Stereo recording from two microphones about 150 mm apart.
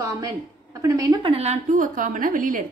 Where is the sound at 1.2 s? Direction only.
40° right (ahead or behind).